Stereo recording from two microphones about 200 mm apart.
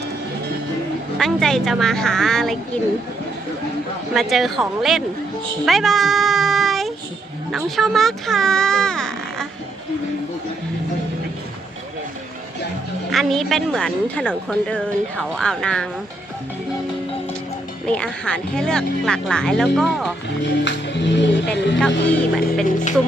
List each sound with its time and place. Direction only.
1.2 s speech: centre (ahead or behind)
4.1 s speech: centre (ahead or behind)
5.6 s a sound: centre (ahead or behind)
7.5 s speech: centre (ahead or behind)
13.1 s speech: centre (ahead or behind)
17.8 s speech: 5° left (ahead or behind)
20.4 s speech: 60° left (ahead or behind)
22.0 s speech: 5° left (ahead or behind)
22.6 s speech: 40° left (ahead or behind)